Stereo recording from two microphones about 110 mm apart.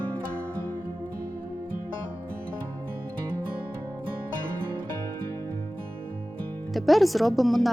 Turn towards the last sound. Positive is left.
turn(degrees=0)  # may be behind; listen again after turning